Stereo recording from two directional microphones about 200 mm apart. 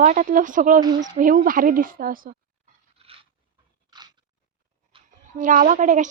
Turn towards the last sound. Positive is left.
turn(degrees=-40)  # may be behind; listen again after turning